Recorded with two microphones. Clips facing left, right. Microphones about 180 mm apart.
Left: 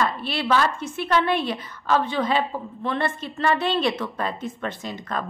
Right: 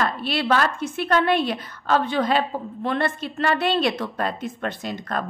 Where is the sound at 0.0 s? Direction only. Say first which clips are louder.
Right 1 dB; 70° right (ahead or behind).